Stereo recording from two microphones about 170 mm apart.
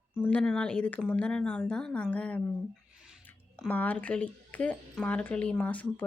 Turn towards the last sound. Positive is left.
turn(degrees=10)  # may be behind; listen again after turning